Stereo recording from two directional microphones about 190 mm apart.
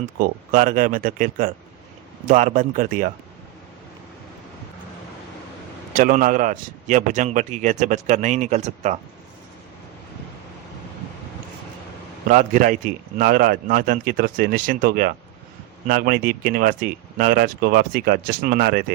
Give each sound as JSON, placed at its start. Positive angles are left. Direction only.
{"t": 0.2, "sound": "speech", "side_deg": -45}
{"t": 5.9, "sound": "a man's voice", "side_deg": -45}
{"t": 12.3, "sound": "speech", "side_deg": -45}